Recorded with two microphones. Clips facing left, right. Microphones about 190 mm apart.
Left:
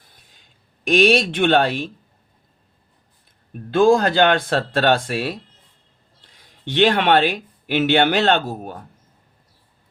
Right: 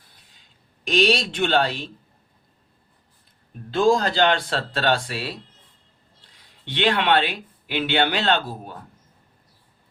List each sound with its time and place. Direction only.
0.9 s speech: 50° left (ahead or behind)
3.7 s speech: 55° left (ahead or behind)
6.7 s speech: 45° left (ahead or behind)